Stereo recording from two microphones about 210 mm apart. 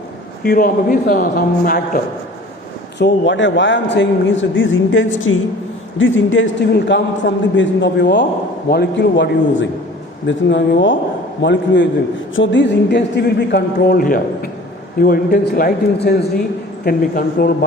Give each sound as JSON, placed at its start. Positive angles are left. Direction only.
{"t": 0.4, "sound": "speech", "side_deg": 45}
{"t": 3.0, "sound": "a man's voice", "side_deg": 60}